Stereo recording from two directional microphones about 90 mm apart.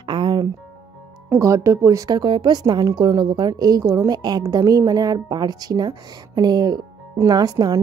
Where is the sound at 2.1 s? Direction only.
55° right (ahead or behind).